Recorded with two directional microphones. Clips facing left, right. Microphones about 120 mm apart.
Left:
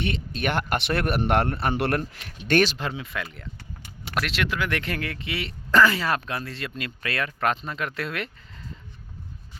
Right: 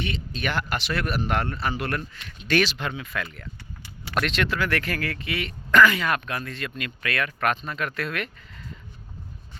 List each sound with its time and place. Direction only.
0.0 s speech: 55° left (ahead or behind)
2.1 s speech: 50° left (ahead or behind)
2.7 s speech: 30° left (ahead or behind)
4.1 s speech: 5° left (ahead or behind); by 8.6 s 25° left (ahead or behind)